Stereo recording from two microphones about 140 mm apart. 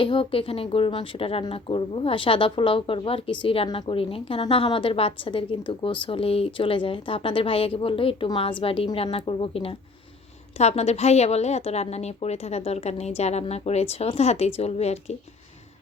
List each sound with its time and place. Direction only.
0.0 s a woman's voice: 40° left (ahead or behind)